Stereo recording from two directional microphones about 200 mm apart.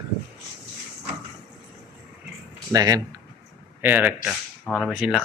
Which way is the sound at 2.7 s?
20° right (ahead or behind).